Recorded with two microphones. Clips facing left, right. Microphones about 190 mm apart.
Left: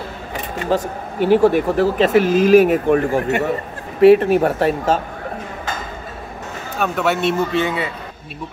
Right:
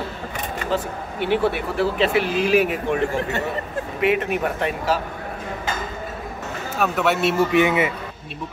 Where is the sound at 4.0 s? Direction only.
35° left (ahead or behind).